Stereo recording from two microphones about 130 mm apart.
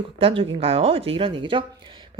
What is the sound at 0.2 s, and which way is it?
Speech, 45° right (ahead or behind).